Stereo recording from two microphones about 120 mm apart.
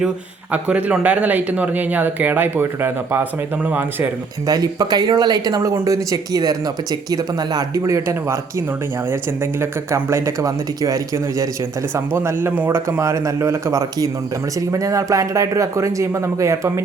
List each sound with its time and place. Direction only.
0.5 s speech: 10° right (ahead or behind)
4.4 s speech: 30° right (ahead or behind)
9.6 s speech: 20° right (ahead or behind)